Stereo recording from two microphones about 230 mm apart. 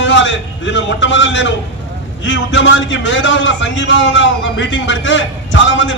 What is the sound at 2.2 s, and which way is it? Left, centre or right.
A man's voice, left.